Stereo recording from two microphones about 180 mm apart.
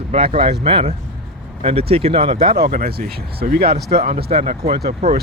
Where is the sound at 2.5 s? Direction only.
55° right (ahead or behind).